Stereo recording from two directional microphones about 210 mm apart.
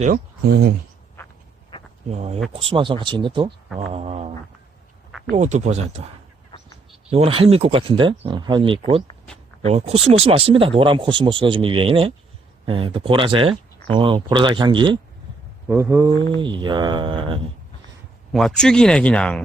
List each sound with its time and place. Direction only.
0.0 s speech: 45° right (ahead or behind)
1.7 s a sound: 20° left (ahead or behind)
2.0 s speech: 30° right (ahead or behind)
5.3 s speech: 35° right (ahead or behind)
7.1 s speech: 25° right (ahead or behind)
15.6 s speech: 10° right (ahead or behind)
18.3 s speech: centre (ahead or behind)